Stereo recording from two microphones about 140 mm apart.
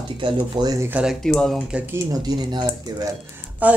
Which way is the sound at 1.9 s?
30° right (ahead or behind).